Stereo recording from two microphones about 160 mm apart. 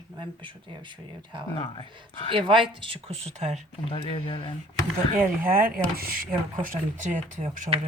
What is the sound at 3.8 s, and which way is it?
Speech, 35° left (ahead or behind).